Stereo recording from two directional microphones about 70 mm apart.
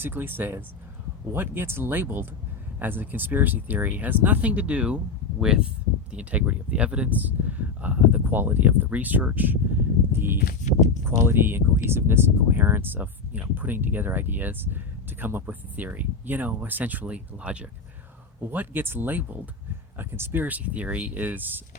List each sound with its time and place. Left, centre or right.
0.0 s speech: right
10.1 s a sound: right
11.0 s speech: right; by 17.7 s centre
18.5 s speech: right